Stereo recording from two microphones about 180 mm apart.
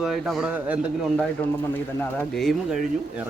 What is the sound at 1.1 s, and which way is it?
Speech, 5° left (ahead or behind).